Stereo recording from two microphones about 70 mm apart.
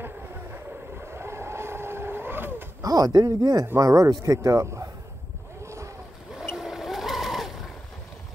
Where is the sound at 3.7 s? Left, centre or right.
Right.